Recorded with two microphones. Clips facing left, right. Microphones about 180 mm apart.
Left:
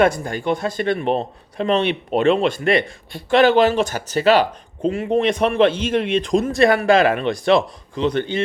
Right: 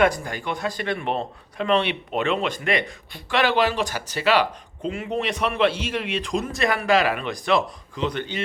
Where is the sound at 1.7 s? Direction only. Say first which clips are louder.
Left 3 dB; 45° left (ahead or behind).